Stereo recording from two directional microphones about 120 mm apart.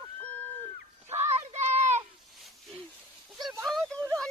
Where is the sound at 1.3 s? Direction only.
65° right (ahead or behind).